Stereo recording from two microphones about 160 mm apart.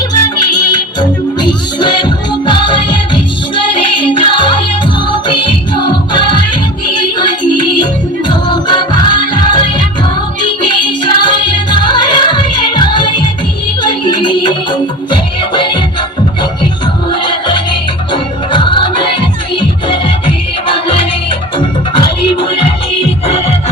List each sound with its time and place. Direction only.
0.1 s music: 25° left (ahead or behind)
18.1 s music: 30° left (ahead or behind)
21.6 s music: 30° left (ahead or behind)